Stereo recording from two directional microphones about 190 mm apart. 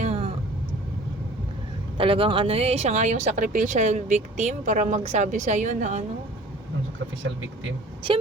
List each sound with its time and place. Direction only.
0.0 s vehicle: 30° right (ahead or behind)
2.0 s speech: 30° right (ahead or behind)
7.2 s speech: 85° right